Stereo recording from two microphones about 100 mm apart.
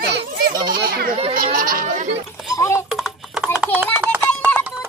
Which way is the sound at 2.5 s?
30° left (ahead or behind).